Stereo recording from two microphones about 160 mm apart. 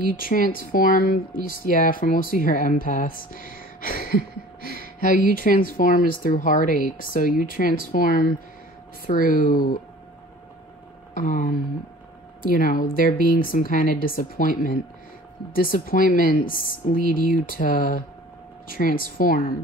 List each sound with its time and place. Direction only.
0.1 s speech: 60° left (ahead or behind)
4.6 s a sound: 80° right
5.0 s speech: 60° left (ahead or behind)
11.1 s speech: 55° left (ahead or behind)